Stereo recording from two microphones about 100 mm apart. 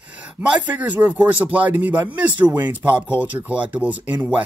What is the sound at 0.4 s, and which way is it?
Speech, 15° right (ahead or behind).